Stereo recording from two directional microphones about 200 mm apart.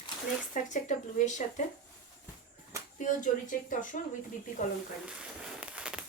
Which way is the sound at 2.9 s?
40° left (ahead or behind).